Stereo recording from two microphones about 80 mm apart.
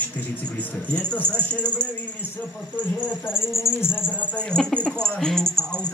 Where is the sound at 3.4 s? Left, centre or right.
Left.